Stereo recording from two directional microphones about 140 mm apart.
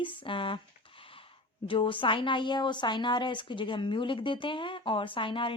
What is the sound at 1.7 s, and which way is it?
A woman's voice, 35° left (ahead or behind).